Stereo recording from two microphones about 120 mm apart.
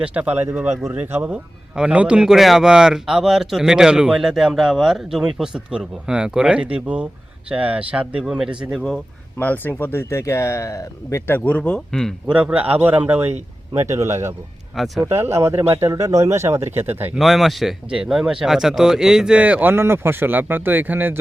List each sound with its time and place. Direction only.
0.0 s speech: 10° right (ahead or behind)
9.4 s speech: 15° left (ahead or behind)
12.3 s speech: 10° right (ahead or behind)
17.2 s speech: centre (ahead or behind)